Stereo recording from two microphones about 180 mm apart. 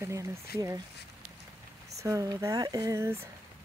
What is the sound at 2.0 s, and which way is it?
Speech, 20° right (ahead or behind).